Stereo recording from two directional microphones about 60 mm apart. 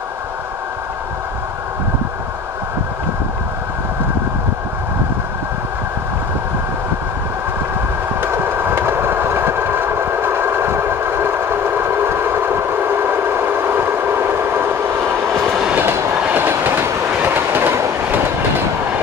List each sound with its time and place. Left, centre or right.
8.2 s train: right